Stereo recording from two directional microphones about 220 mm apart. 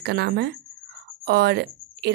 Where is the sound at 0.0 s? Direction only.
45° right (ahead or behind).